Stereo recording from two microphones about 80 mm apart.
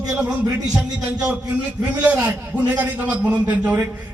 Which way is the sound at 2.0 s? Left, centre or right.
Centre.